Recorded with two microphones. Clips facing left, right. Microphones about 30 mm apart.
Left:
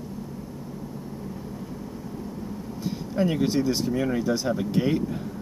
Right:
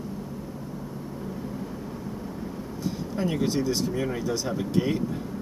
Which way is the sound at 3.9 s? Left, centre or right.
Centre.